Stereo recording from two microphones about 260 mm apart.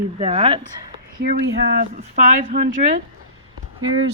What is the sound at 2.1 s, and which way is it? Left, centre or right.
Speech, right.